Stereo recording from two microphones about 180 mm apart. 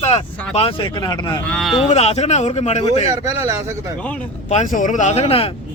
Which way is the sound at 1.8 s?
35° left (ahead or behind).